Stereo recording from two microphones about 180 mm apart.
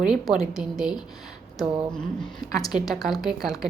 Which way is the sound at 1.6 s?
25° right (ahead or behind).